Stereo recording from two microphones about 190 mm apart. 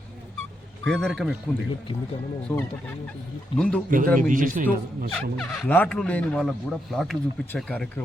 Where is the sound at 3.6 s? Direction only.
5° left (ahead or behind).